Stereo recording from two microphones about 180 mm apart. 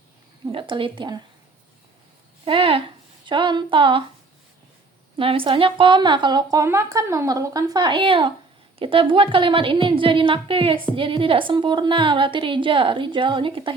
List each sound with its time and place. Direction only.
0.4 s a woman's voice: 30° right (ahead or behind)
2.4 s a woman's voice: 30° right (ahead or behind)
5.1 s a woman's voice: 30° right (ahead or behind)